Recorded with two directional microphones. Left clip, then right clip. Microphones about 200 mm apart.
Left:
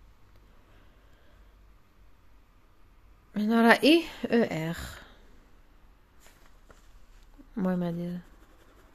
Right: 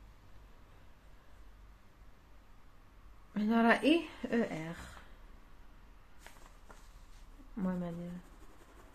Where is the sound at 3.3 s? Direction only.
40° left (ahead or behind).